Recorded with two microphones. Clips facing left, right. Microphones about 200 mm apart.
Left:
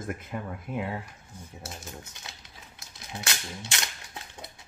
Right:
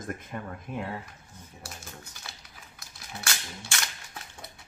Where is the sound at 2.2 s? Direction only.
20° left (ahead or behind).